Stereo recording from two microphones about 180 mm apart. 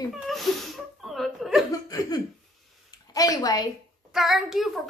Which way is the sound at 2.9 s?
20° left (ahead or behind).